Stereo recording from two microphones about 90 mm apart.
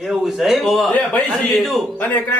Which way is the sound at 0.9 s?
15° left (ahead or behind).